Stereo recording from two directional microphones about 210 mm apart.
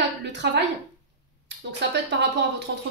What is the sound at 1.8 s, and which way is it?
Speech, 55° right (ahead or behind).